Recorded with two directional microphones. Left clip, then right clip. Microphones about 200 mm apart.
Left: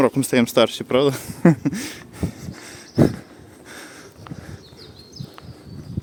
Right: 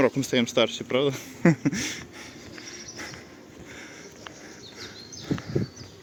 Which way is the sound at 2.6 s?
30° left (ahead or behind).